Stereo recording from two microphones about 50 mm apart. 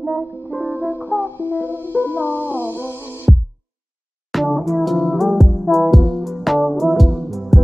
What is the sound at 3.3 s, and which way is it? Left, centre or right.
Music, centre.